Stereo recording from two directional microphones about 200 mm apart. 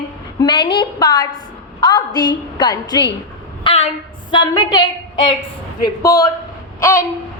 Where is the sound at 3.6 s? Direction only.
30° left (ahead or behind).